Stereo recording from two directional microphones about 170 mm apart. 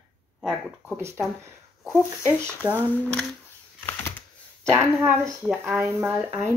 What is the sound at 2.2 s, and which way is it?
Speech, 10° left (ahead or behind).